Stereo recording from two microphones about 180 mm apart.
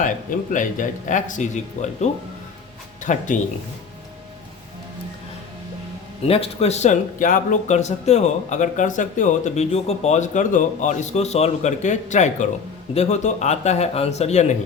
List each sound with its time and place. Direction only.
0.5 s speech: 45° left (ahead or behind)
6.2 s speech: 35° left (ahead or behind)